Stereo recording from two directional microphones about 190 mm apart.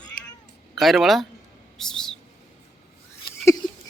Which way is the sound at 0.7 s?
Centre (ahead or behind).